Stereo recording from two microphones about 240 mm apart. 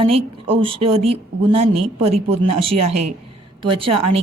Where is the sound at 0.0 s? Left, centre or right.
Right.